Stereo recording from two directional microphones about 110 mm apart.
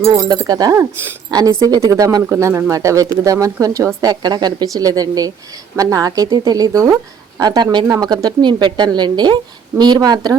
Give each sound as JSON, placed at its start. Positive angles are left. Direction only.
{"t": 0.0, "sound": "speech", "side_deg": -35}